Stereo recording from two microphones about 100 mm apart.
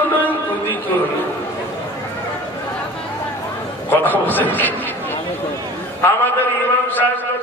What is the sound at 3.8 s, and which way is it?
Speech, 20° left (ahead or behind).